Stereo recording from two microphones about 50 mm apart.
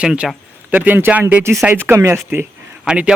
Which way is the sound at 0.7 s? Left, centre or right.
Right.